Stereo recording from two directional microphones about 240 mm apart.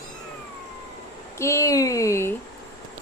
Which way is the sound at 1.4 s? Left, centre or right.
Centre.